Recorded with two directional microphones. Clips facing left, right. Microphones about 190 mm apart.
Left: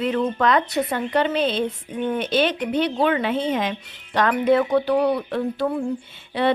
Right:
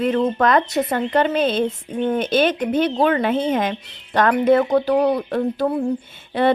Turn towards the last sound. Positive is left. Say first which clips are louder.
# right 3 dB
turn(degrees=-50)  # may be behind; listen again after turning